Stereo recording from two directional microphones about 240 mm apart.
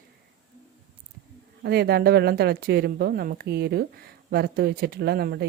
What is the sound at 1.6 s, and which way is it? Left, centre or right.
A woman's voice, right.